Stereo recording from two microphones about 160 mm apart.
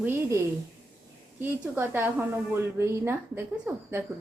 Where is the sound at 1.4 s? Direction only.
15° right (ahead or behind).